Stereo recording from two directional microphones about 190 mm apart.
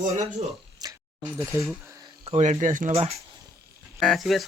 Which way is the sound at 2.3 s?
40° right (ahead or behind).